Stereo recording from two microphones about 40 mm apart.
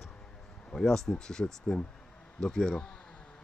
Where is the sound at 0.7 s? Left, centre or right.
Centre.